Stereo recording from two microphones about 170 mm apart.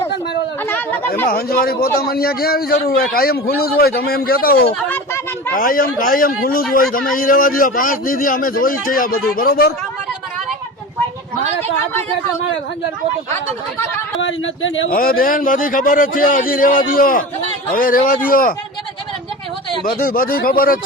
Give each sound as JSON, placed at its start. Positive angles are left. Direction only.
{"t": 0.7, "sound": "speech", "side_deg": 10}
{"t": 1.3, "sound": "a man's voice", "side_deg": 60}
{"t": 14.2, "sound": "a man's voice", "side_deg": 90}
{"t": 19.8, "sound": "a man's voice", "side_deg": 55}